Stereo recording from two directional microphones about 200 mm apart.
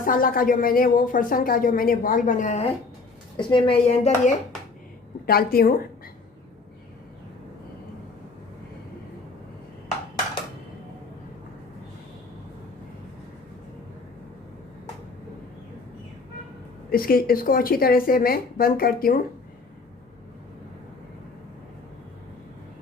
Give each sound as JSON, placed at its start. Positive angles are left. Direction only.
{"t": 0.0, "sound": "a woman's voice", "side_deg": 45}
{"t": 5.2, "sound": "a woman's voice", "side_deg": 50}
{"t": 16.9, "sound": "a woman's voice", "side_deg": 45}